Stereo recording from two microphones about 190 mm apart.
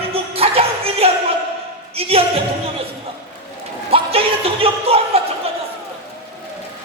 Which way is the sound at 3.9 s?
30° right (ahead or behind).